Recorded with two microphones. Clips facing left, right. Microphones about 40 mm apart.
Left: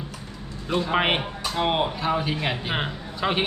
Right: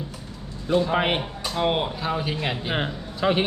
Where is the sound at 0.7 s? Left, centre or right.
Left.